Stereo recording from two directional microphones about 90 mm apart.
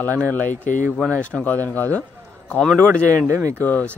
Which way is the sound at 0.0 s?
20° left (ahead or behind).